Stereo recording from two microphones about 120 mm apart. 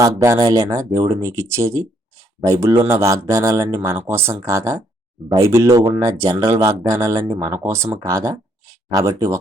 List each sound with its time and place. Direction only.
0.0 s speech: 25° right (ahead or behind)